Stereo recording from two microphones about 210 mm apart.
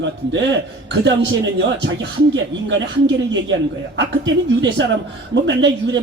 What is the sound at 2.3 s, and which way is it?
Speech, 60° right (ahead or behind).